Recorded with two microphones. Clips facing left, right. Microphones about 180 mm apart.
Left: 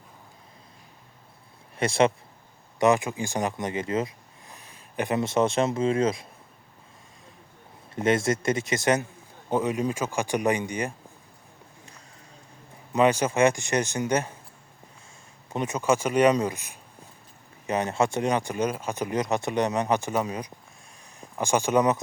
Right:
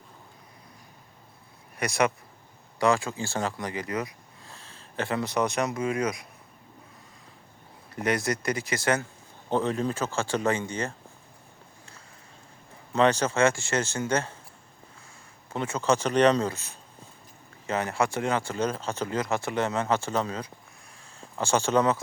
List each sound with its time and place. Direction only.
1.8 s speech: 25° left (ahead or behind)
7.9 s speech: 25° left (ahead or behind)
9.5 s speech: 10° left (ahead or behind)
12.9 s speech: 10° left (ahead or behind)
15.4 s speech: 20° left (ahead or behind)